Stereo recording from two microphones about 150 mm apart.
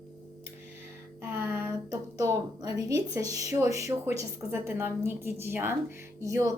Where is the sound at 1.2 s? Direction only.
15° right (ahead or behind).